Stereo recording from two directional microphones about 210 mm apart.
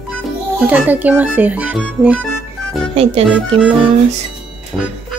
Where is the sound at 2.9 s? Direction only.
30° right (ahead or behind).